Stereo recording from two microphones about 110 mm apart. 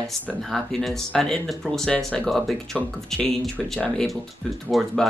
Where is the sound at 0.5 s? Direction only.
5° left (ahead or behind).